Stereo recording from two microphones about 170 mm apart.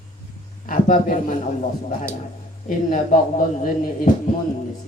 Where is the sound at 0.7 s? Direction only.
50° left (ahead or behind).